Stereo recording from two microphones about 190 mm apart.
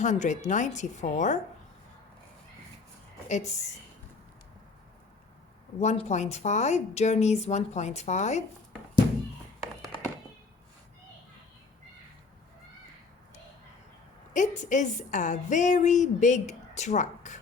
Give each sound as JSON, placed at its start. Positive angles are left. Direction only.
{"t": 0.0, "sound": "a woman's voice", "side_deg": 40}
{"t": 3.2, "sound": "a woman's voice", "side_deg": 35}
{"t": 5.8, "sound": "a woman's voice", "side_deg": 35}
{"t": 14.3, "sound": "a woman's voice", "side_deg": 40}